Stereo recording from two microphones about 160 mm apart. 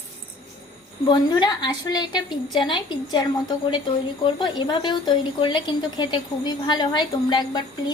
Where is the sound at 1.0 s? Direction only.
25° left (ahead or behind).